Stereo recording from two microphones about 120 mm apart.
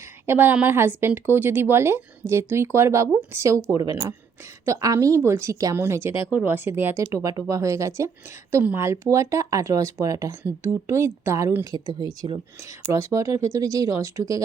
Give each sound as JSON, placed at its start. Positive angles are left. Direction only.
{"t": 0.3, "sound": "speech", "side_deg": -15}
{"t": 7.1, "sound": "speech", "side_deg": -30}